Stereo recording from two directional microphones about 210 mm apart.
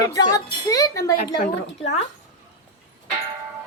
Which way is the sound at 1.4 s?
30° left (ahead or behind).